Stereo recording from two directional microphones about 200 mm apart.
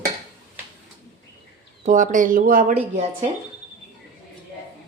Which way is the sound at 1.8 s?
40° right (ahead or behind).